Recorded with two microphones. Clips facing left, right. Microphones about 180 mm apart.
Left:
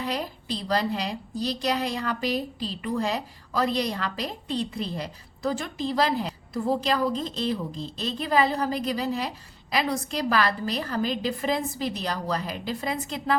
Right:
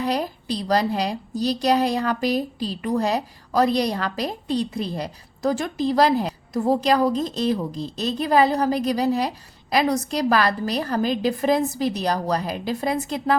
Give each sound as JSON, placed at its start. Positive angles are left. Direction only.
{"t": 0.0, "sound": "a woman's voice", "side_deg": -40}